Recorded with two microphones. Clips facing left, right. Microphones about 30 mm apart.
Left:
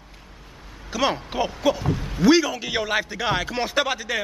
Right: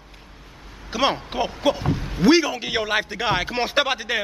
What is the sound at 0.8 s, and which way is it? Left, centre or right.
Speech, right.